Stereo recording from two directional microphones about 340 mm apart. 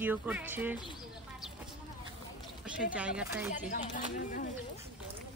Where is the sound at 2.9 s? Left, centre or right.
Centre.